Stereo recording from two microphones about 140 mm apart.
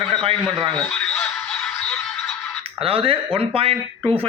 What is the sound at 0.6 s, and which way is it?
Speech, 30° right (ahead or behind).